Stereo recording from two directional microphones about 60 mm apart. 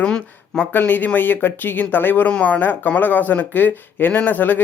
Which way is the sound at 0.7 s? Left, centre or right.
Left.